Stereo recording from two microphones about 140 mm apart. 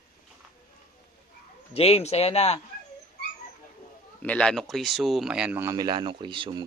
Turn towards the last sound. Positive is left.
turn(degrees=-35)  # may be behind; listen again after turning